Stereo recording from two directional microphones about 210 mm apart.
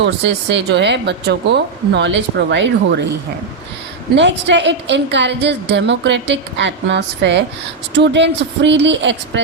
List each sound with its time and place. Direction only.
0.0 s a woman's voice: 55° right (ahead or behind)
4.1 s a woman's voice: 55° right (ahead or behind)